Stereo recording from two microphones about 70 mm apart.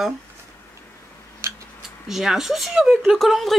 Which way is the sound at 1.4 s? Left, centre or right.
Right.